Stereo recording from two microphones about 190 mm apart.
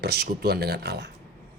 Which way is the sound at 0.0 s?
60° right (ahead or behind).